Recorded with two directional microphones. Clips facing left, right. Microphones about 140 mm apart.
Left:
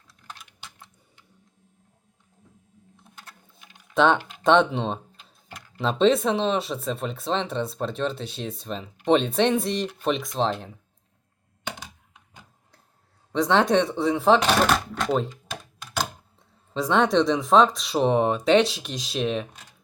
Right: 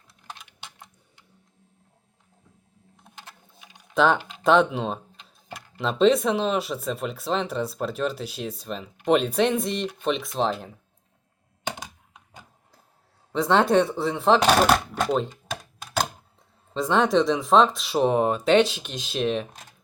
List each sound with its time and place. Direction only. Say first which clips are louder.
3.9 s speech: left 1 dB; centre (ahead or behind)
5.5 s a sound: even; 15° right (ahead or behind)
6.0 s speech: right 1 dB; centre (ahead or behind)
13.3 s speech: right 1 dB; centre (ahead or behind)
16.7 s speech: even; centre (ahead or behind)